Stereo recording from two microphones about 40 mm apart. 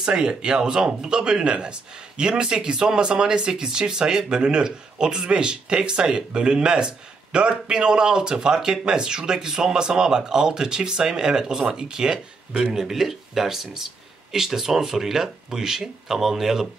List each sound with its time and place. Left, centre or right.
0.0 s speech: right